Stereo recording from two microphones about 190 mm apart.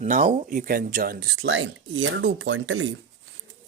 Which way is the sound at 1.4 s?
85° right.